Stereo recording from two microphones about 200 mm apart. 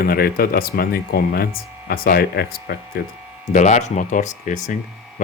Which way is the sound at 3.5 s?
35° left (ahead or behind).